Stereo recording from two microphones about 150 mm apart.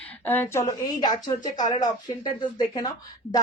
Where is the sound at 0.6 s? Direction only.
25° left (ahead or behind).